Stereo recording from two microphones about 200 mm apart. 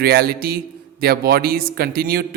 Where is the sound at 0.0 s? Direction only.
50° right (ahead or behind).